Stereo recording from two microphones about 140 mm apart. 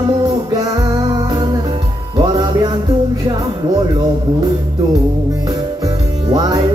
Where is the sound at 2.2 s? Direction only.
30° right (ahead or behind).